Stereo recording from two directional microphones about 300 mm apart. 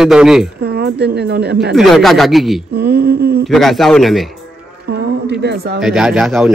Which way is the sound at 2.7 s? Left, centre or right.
Right.